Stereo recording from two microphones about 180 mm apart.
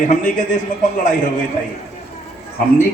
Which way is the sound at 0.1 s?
45° left (ahead or behind).